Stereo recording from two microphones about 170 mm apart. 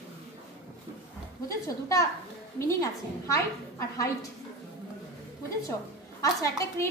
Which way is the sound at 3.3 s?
15° left (ahead or behind).